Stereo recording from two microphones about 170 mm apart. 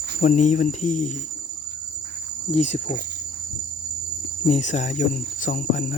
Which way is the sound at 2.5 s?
40° left (ahead or behind).